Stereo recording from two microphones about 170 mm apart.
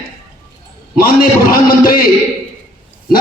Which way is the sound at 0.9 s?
55° left (ahead or behind).